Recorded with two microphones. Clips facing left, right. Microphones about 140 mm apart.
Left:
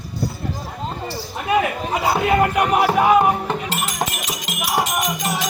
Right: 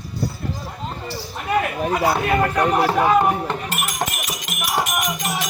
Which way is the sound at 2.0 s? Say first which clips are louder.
Left 3 dB; 15° left (ahead or behind).